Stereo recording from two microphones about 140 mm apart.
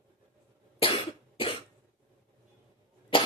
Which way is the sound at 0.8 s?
40° left (ahead or behind).